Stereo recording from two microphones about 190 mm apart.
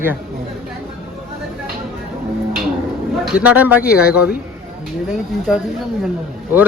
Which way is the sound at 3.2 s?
5° right (ahead or behind).